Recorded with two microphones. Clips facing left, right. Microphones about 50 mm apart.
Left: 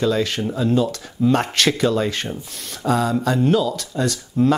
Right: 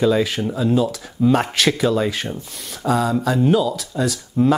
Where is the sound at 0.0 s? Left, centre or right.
Centre.